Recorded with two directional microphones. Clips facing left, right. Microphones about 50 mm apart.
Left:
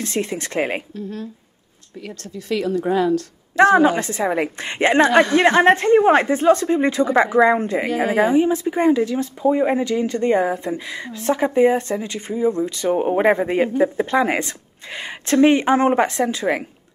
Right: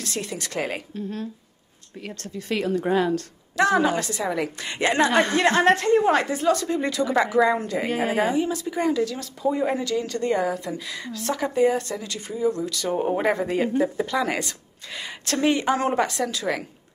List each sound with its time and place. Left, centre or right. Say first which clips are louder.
0.0 s speech: left 7 dB; left
2.1 s a woman's voice: left 3 dB; right
3.5 s a woman's voice: left 7 dB; left